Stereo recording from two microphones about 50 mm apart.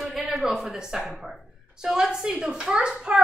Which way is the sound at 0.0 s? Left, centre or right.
Centre.